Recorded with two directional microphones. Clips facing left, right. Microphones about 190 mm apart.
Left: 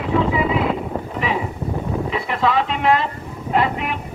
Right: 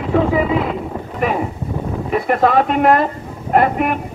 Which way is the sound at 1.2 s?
50° right (ahead or behind).